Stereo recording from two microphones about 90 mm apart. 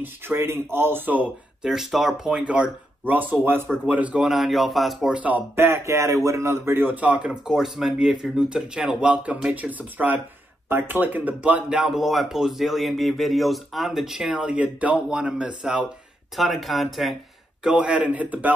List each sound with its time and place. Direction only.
0.0 s speech: 25° right (ahead or behind)
1.6 s speech: 5° right (ahead or behind)
4.2 s speech: centre (ahead or behind)
5.1 s speech: 20° right (ahead or behind); by 17.2 s centre (ahead or behind)
17.6 s speech: 10° right (ahead or behind)